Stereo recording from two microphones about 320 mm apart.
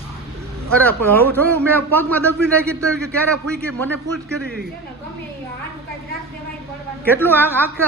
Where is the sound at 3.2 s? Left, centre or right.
Centre.